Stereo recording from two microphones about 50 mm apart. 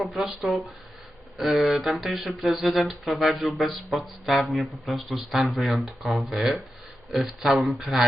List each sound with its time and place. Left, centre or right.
0.0 s speech: centre
1.4 s speech: centre